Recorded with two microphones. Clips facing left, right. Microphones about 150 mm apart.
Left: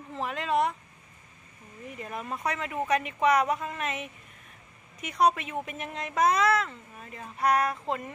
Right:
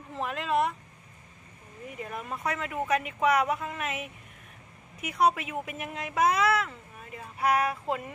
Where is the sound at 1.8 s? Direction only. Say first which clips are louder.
Left 1 dB; centre (ahead or behind).